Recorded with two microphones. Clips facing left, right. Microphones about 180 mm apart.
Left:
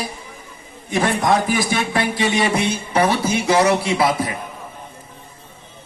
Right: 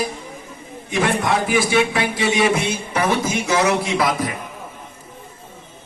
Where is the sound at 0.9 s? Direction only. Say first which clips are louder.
Left 2 dB; 40° left (ahead or behind).